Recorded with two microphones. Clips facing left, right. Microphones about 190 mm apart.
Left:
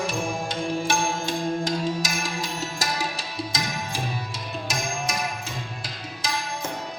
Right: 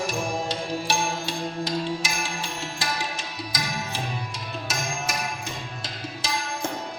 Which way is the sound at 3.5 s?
25° left (ahead or behind).